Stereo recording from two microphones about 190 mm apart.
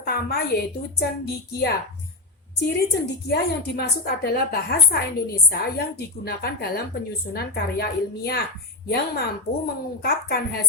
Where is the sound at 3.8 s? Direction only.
55° left (ahead or behind).